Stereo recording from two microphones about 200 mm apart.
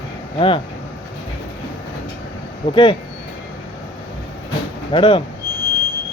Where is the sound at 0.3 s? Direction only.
25° left (ahead or behind).